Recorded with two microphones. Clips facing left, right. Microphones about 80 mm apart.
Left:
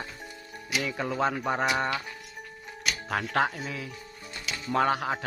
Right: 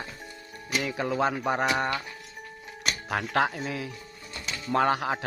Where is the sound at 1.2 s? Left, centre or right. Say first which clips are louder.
Right 1 dB; centre.